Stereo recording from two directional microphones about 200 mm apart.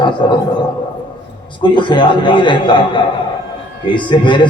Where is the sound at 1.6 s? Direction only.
25° left (ahead or behind).